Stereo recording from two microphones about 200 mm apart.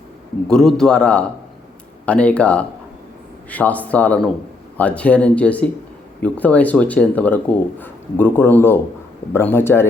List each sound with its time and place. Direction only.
0.4 s a man's voice: 5° left (ahead or behind)